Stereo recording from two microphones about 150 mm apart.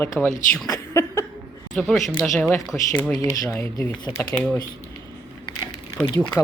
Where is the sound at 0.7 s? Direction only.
20° left (ahead or behind).